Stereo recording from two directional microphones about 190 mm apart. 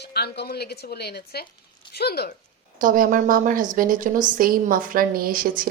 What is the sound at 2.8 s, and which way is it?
Speech, 45° right (ahead or behind).